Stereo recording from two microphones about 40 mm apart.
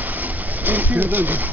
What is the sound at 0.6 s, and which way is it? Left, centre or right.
Speech, right.